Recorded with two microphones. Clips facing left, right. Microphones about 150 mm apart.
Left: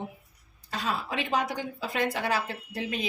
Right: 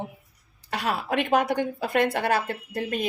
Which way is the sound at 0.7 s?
65° right (ahead or behind).